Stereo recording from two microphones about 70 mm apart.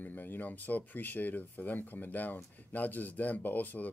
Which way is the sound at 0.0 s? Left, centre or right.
Left.